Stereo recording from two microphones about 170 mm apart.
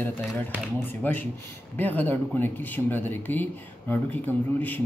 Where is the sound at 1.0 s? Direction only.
10° left (ahead or behind).